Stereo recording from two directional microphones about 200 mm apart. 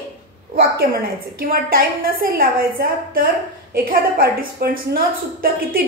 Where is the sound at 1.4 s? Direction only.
45° right (ahead or behind).